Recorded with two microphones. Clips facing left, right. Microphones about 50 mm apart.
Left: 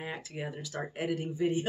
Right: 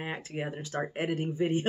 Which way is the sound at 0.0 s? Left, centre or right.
Right.